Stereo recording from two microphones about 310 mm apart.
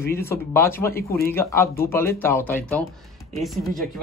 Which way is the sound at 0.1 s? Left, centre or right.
Centre.